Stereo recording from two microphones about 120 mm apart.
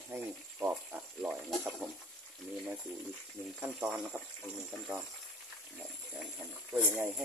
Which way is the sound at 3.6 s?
10° right (ahead or behind).